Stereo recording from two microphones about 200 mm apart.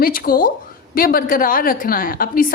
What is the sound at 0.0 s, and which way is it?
A woman's voice, 45° left (ahead or behind).